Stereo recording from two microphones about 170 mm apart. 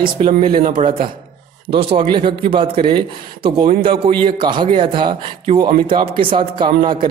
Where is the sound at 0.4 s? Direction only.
30° right (ahead or behind).